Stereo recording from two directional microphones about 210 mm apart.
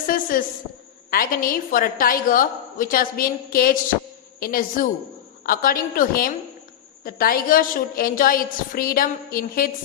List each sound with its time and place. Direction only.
0.1 s a woman's voice: 40° left (ahead or behind)